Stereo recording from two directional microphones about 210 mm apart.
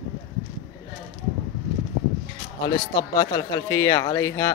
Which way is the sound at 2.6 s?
20° left (ahead or behind).